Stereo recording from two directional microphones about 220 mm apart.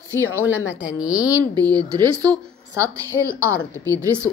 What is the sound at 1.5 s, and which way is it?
A woman's voice, 15° right (ahead or behind).